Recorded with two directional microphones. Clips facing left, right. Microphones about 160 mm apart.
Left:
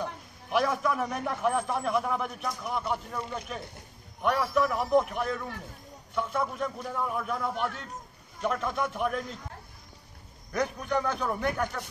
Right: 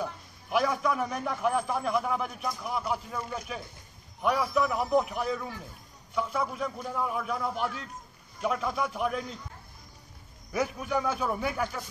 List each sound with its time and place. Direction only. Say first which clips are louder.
0.0 s a man's voice: even; centre (ahead or behind)
10.5 s a man's voice: even; 5° right (ahead or behind)